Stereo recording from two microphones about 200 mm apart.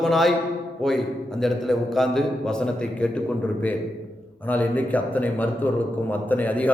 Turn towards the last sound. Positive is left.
turn(degrees=10)  # may be behind; listen again after turning